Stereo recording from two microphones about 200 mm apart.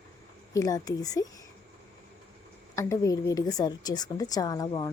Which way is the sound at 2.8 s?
15° left (ahead or behind).